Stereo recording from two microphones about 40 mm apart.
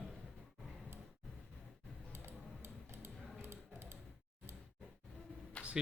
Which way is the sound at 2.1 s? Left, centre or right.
Right.